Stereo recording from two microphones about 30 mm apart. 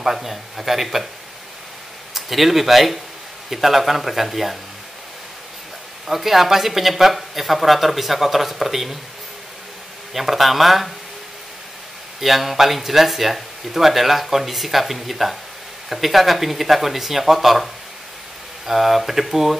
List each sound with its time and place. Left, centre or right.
0.0 s speech: centre
2.1 s speech: centre
6.0 s speech: centre
10.1 s speech: centre
12.2 s speech: centre
18.7 s speech: centre